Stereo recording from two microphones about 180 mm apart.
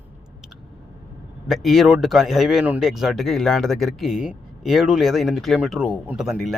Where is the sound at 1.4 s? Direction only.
Centre (ahead or behind).